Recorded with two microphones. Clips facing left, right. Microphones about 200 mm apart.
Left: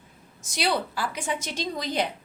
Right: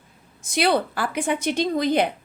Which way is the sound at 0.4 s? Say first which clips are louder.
Right 6 dB; 55° right (ahead or behind).